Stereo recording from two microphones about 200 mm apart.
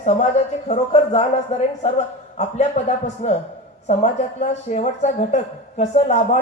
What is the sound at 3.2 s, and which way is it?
Speech, 35° left (ahead or behind).